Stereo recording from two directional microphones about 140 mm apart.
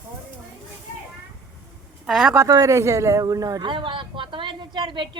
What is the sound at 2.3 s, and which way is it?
Speech, 20° right (ahead or behind).